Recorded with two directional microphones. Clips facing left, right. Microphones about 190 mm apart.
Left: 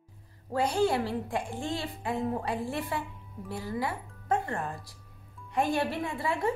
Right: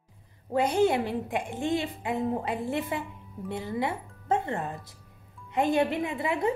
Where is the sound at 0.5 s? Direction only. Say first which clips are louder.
Right 3 dB; 20° right (ahead or behind).